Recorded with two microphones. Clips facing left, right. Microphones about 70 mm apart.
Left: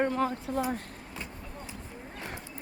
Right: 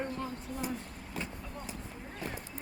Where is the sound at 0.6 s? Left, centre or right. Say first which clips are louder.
Left 7 dB; left.